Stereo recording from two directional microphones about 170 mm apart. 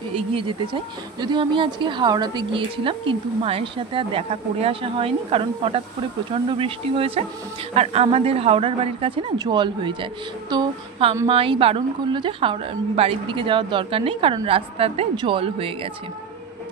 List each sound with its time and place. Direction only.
0.1 s a woman's voice: 30° right (ahead or behind)
9.4 s a sound: 25° right (ahead or behind)
11.2 s a woman's voice: 30° right (ahead or behind)